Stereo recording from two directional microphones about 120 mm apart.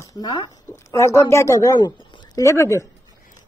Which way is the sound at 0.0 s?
35° left (ahead or behind).